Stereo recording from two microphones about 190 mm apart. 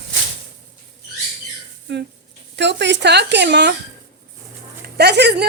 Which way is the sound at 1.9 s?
65° right (ahead or behind).